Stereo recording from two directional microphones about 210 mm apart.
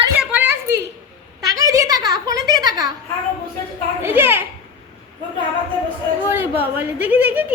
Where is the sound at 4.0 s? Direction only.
10° right (ahead or behind).